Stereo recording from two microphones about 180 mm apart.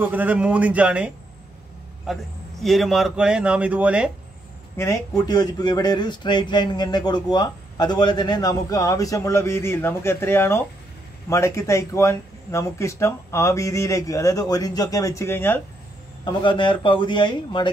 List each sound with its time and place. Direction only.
0.0 s a man's voice: 10° right (ahead or behind)
4.7 s speech: 15° left (ahead or behind)
16.3 s speech: 25° left (ahead or behind)